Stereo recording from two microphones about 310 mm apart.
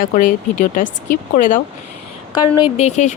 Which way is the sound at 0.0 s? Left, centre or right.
Left.